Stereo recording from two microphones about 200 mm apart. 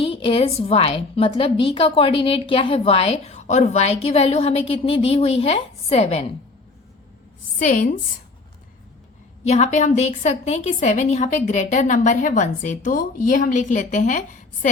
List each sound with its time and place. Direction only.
0.0 s a woman's voice: 25° left (ahead or behind)
7.6 s a woman's voice: 40° left (ahead or behind)
9.4 s a woman's voice: 35° left (ahead or behind)